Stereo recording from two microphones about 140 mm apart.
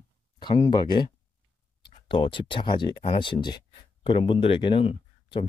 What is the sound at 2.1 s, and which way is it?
Speech, 35° left (ahead or behind).